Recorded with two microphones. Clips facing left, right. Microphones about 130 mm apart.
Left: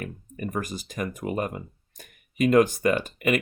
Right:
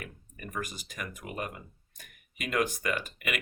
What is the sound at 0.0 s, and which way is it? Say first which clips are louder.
Speech: left 10 dB; 35° left (ahead or behind).